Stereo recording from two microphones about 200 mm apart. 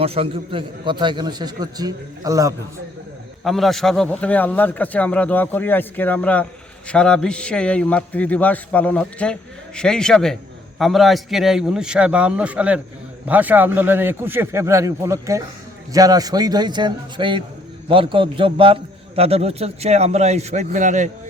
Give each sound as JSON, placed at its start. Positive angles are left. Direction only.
{"t": 0.0, "sound": "a man's voice", "side_deg": -30}
{"t": 3.4, "sound": "a man's voice", "side_deg": 0}